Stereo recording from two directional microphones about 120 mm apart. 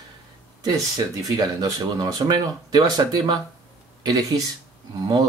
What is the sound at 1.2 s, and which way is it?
Speech, 30° right (ahead or behind).